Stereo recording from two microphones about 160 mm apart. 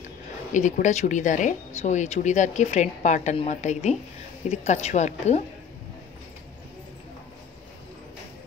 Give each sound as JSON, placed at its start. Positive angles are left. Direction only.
{"t": 0.0, "sound": "speech", "side_deg": 50}